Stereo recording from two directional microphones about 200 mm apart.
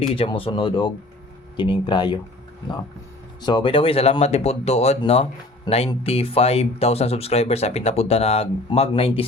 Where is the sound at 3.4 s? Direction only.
25° left (ahead or behind).